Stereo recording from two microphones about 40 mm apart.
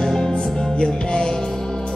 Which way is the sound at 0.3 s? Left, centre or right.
Left.